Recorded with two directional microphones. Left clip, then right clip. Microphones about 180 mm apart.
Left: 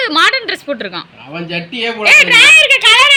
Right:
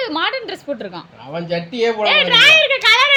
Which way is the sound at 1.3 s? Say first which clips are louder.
Even; 65° right (ahead or behind).